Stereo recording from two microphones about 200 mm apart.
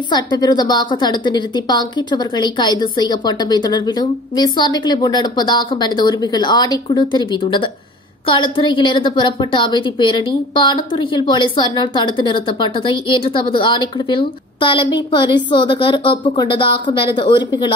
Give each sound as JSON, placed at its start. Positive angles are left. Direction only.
{"t": 0.1, "sound": "a woman's voice", "side_deg": 20}